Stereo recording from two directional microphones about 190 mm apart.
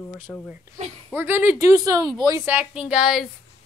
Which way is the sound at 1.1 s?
10° right (ahead or behind).